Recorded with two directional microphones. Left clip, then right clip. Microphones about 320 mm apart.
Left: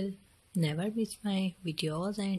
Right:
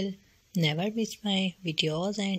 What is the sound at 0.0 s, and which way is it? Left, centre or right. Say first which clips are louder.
Speech: right 4 dB; centre.